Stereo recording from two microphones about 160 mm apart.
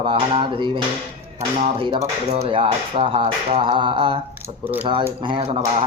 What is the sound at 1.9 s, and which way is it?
Speech, 40° right (ahead or behind).